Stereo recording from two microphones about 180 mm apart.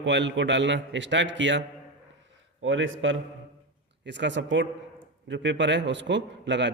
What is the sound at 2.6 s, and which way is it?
A man's voice, 90° right.